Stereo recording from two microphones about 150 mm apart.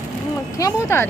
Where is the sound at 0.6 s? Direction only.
20° left (ahead or behind).